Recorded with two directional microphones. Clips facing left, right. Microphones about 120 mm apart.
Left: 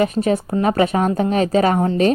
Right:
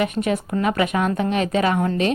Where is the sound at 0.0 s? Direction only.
35° left (ahead or behind).